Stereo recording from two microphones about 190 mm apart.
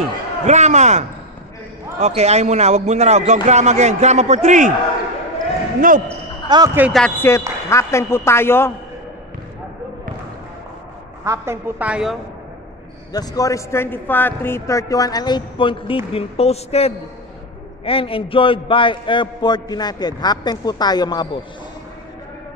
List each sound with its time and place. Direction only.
0.5 s a man's voice: 35° right (ahead or behind)
5.8 s speech: 45° right (ahead or behind)
6.0 s basketball bounce: 15° right (ahead or behind)
6.8 s speech: centre (ahead or behind)
7.2 s a man's voice: 15° left (ahead or behind)
11.2 s a woman's voice: 15° right (ahead or behind)
13.1 s a man's voice: 20° left (ahead or behind)